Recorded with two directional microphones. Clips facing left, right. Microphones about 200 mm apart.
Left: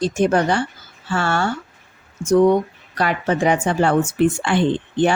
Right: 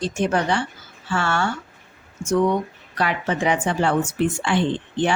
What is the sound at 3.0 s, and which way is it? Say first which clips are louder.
A woman's voice: left 3 dB; 45° left (ahead or behind).